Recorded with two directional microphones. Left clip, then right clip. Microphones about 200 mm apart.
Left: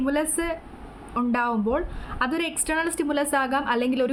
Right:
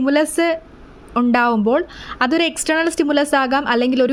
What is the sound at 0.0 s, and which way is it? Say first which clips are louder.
A woman's voice: right 9 dB; 40° right (ahead or behind).